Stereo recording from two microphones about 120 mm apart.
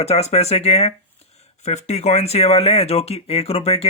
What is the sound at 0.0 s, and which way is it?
Speech, 65° left (ahead or behind).